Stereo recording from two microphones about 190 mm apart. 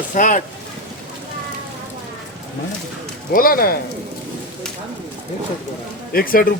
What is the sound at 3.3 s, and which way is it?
Speech, 50° left (ahead or behind).